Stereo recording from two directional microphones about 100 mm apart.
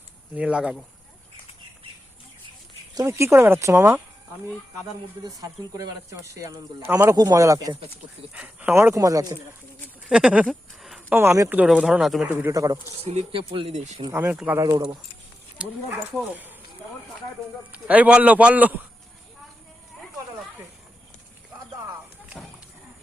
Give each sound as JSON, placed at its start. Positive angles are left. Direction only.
{"t": 0.3, "sound": "speech", "side_deg": -10}
{"t": 2.9, "sound": "speech", "side_deg": -30}
{"t": 5.4, "sound": "speech", "side_deg": -35}
{"t": 8.3, "sound": "speech", "side_deg": -10}
{"t": 8.7, "sound": "speech", "side_deg": -25}
{"t": 10.1, "sound": "speech", "side_deg": -10}
{"t": 10.4, "sound": "a sound", "side_deg": 0}
{"t": 11.1, "sound": "speech", "side_deg": -25}
{"t": 12.5, "sound": "speech", "side_deg": -35}
{"t": 13.0, "sound": "speech", "side_deg": -85}
{"t": 14.1, "sound": "speech", "side_deg": -25}
{"t": 14.6, "sound": "speech", "side_deg": -45}
{"t": 15.6, "sound": "speech", "side_deg": -10}
{"t": 17.7, "sound": "speech", "side_deg": -15}